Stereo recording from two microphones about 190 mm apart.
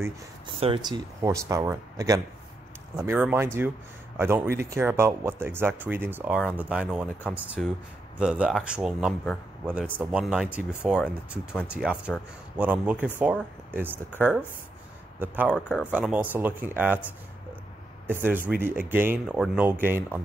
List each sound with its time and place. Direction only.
0.6 s speech: 25° right (ahead or behind); by 14.0 s 10° right (ahead or behind)
15.1 s speech: 10° right (ahead or behind)
15.5 s speech: 10° left (ahead or behind)
15.9 s speech: 5° right (ahead or behind)
18.0 s speech: 10° right (ahead or behind)